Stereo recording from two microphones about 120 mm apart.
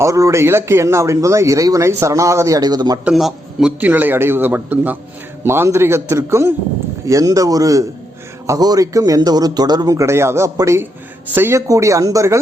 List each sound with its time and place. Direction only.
0.0 s a man's voice: 25° right (ahead or behind)
3.0 s a man's voice: 5° right (ahead or behind)
3.8 s a man's voice: 15° right (ahead or behind)